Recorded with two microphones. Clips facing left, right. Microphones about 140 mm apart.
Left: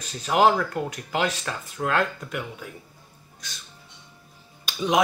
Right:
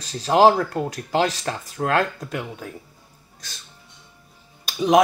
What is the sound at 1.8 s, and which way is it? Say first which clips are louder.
Speech: right 4 dB; 25° right (ahead or behind).